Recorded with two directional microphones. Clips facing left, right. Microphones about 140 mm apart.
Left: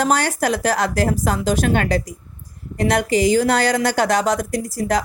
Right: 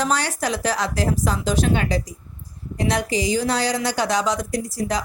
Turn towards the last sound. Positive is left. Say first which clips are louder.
# left 4 dB
turn(degrees=50)  # may be behind; listen again after turning